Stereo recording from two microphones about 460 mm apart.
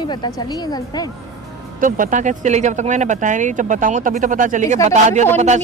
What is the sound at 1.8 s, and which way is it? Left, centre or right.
Speech, centre.